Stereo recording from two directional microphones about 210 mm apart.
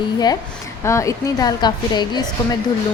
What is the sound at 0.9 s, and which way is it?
Speech, 15° left (ahead or behind).